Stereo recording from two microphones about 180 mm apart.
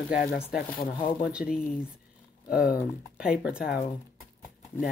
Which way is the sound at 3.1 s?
5° right (ahead or behind).